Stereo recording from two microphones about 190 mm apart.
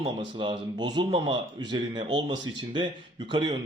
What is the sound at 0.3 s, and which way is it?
Speech, 25° right (ahead or behind).